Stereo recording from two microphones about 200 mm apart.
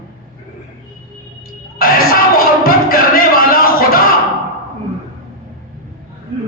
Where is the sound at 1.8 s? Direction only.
45° left (ahead or behind).